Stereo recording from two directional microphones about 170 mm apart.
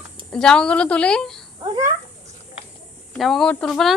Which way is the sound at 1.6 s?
20° right (ahead or behind).